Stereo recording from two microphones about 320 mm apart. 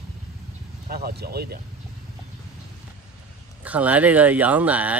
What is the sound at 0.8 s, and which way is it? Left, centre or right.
Speech, right.